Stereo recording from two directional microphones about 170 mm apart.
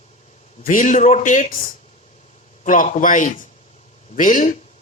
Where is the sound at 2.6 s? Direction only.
50° left (ahead or behind).